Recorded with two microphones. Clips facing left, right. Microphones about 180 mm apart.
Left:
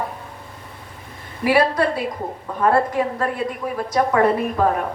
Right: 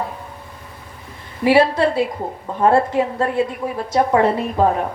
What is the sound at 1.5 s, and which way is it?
A woman's voice, 25° right (ahead or behind).